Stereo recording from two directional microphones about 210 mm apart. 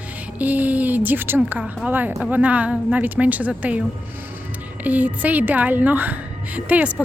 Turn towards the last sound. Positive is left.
turn(degrees=-5)  # may be behind; listen again after turning